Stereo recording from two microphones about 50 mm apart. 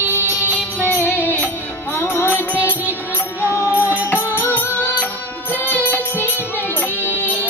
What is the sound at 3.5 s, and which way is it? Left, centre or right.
Music, left.